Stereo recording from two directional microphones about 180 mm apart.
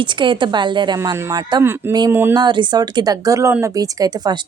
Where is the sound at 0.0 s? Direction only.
25° right (ahead or behind).